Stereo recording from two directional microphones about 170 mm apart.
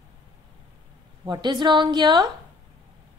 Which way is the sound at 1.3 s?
25° right (ahead or behind).